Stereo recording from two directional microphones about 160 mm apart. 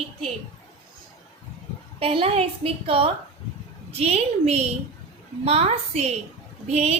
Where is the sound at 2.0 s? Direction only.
35° right (ahead or behind).